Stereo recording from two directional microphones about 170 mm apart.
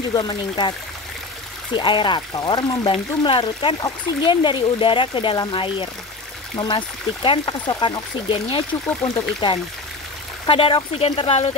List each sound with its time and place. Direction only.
0.1 s speech: 25° left (ahead or behind)
7.2 s speech: 25° left (ahead or behind)